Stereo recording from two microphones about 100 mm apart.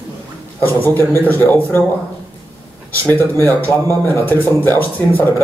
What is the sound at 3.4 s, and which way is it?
Speech, 25° left (ahead or behind).